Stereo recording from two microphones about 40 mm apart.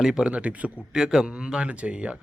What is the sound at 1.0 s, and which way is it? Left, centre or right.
Speech, centre.